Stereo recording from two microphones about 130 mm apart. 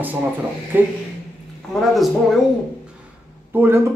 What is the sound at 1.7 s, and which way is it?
Speech, centre (ahead or behind).